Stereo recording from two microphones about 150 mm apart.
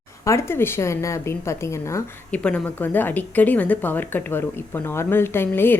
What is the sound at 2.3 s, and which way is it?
Speech, 10° left (ahead or behind).